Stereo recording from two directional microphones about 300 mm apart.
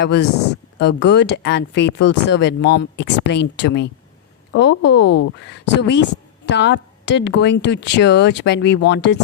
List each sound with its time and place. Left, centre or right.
0.8 s speech: left